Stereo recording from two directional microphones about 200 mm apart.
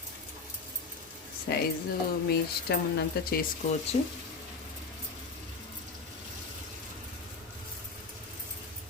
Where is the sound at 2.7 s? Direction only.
55° left (ahead or behind).